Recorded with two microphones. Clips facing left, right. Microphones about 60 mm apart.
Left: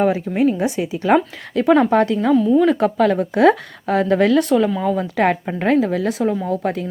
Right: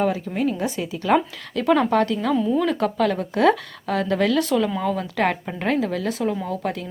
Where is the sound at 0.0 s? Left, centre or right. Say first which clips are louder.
Left 5 dB; left.